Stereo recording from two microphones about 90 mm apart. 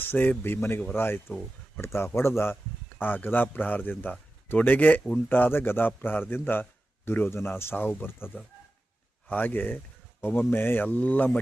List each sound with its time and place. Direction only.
0.0 s a man's voice: 20° left (ahead or behind)
9.3 s a man's voice: 20° left (ahead or behind)